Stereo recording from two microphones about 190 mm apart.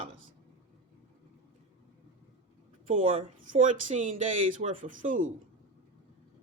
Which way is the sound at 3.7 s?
40° right (ahead or behind).